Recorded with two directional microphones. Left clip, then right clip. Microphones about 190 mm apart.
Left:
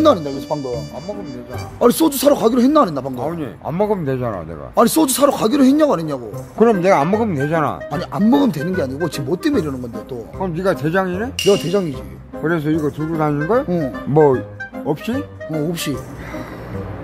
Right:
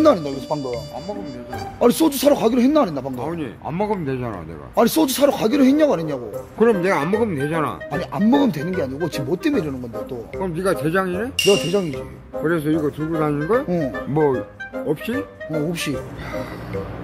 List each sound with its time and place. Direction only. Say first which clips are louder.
0.0 s speech: left 2 dB; 15° left (ahead or behind)
0.5 s speech: left 2 dB; centre (ahead or behind)
1.8 s a man's voice: left 2 dB; 15° left (ahead or behind)
3.2 s speech: left 3 dB; 70° left (ahead or behind)
4.7 s a man's voice: left 3 dB; 20° left (ahead or behind)
6.6 s speech: left 4 dB; 65° left (ahead or behind)
7.9 s a man's voice: even; 20° left (ahead or behind)
10.4 s speech: left 2 dB; 55° left (ahead or behind)
11.4 s speech: left 2 dB; 15° left (ahead or behind)
12.4 s speech: left 2 dB; 55° left (ahead or behind)